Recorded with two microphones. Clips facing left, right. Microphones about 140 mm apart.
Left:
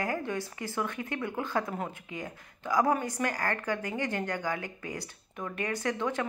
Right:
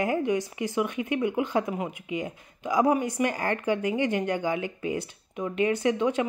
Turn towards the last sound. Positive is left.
turn(degrees=-20)  # may be behind; listen again after turning